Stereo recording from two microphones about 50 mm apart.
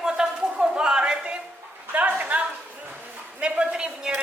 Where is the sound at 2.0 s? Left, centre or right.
Right.